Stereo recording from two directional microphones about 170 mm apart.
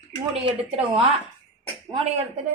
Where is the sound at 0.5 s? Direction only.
35° right (ahead or behind).